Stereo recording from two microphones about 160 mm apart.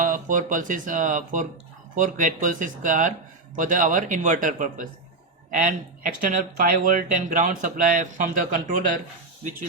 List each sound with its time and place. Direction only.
0.0 s speech: 55° right (ahead or behind)